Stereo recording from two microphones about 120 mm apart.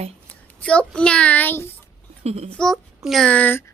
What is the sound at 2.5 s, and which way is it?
A child's voice, 10° left (ahead or behind).